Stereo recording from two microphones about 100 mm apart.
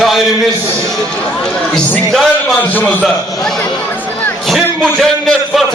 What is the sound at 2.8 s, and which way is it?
Speech, 15° left (ahead or behind).